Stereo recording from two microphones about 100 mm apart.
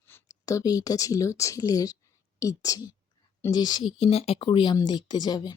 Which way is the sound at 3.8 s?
70° left (ahead or behind).